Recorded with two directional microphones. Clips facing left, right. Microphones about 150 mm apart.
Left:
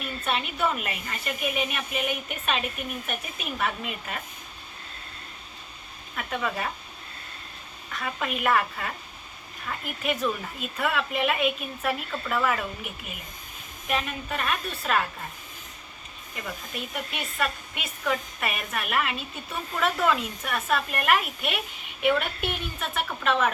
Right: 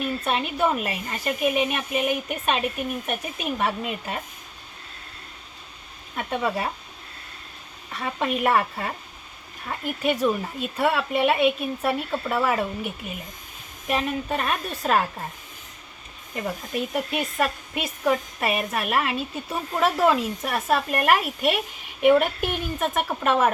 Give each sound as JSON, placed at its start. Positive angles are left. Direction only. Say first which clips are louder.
{"t": 0.3, "sound": "speech", "louder": "right 3 dB", "side_deg": -35}
{"t": 6.1, "sound": "speech", "louder": "right 4 dB", "side_deg": -30}
{"t": 7.9, "sound": "speech", "louder": "right 5 dB", "side_deg": -35}
{"t": 16.3, "sound": "speech", "louder": "right 8 dB", "side_deg": -40}
{"t": 23.0, "sound": "speech", "louder": "right 3 dB", "side_deg": -45}